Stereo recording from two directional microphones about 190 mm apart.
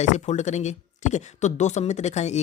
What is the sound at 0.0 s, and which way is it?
Speech, 40° left (ahead or behind).